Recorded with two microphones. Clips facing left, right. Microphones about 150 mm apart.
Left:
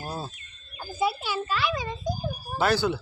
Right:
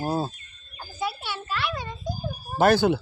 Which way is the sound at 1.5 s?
Centre (ahead or behind).